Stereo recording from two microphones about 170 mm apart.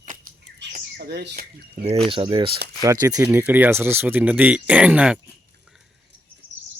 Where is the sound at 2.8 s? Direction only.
20° right (ahead or behind).